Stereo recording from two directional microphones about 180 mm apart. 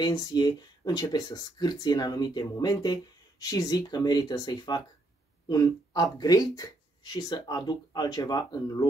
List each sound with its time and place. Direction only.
0.0 s speech: 25° left (ahead or behind)
6.1 s speech: 20° left (ahead or behind)